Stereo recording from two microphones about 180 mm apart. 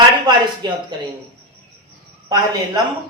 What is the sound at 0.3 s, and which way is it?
Speech, 25° right (ahead or behind).